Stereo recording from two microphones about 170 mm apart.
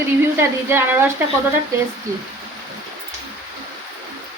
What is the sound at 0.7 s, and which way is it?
Speech, 15° right (ahead or behind).